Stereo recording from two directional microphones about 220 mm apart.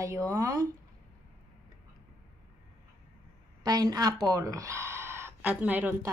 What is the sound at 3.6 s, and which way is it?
A woman's voice, 20° right (ahead or behind).